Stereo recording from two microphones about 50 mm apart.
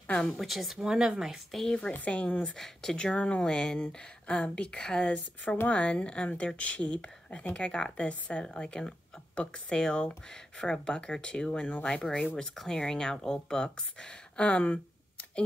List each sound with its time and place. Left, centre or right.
0.0 s speech: centre
0.4 s speech: centre
1.5 s speech: centre
2.0 s speech: left
2.5 s speech: centre
3.0 s speech: left
5.7 s speech: left